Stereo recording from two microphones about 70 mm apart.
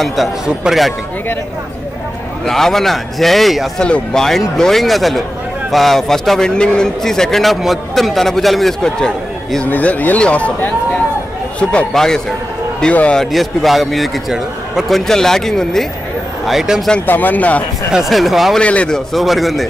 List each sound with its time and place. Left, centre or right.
0.0 s a man's voice: centre
0.7 s speech: centre
2.4 s a man's voice: centre
9.7 s speech: left
11.7 s speech: centre
13.2 s a man's voice: centre
16.4 s a man's voice: centre
17.0 s speech: left
17.9 s a man's voice: centre
18.6 s speech: centre
19.1 s a man's voice: centre